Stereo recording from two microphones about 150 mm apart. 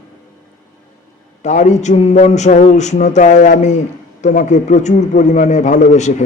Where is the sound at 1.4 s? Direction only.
55° left (ahead or behind).